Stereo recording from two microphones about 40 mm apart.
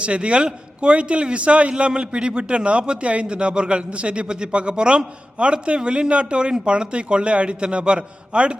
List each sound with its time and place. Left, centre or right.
0.0 s a man's voice: right